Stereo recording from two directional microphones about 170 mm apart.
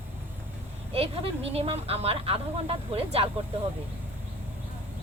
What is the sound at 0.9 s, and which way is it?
Speech, 35° right (ahead or behind).